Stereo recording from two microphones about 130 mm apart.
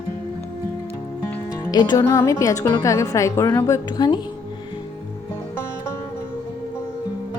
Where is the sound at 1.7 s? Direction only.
35° left (ahead or behind).